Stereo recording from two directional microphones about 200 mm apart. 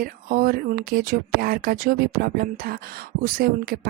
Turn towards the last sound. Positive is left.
turn(degrees=-50)  # may be behind; listen again after turning